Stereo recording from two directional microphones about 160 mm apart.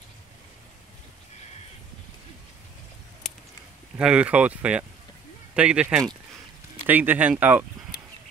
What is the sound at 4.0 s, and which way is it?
Speech, 5° right (ahead or behind).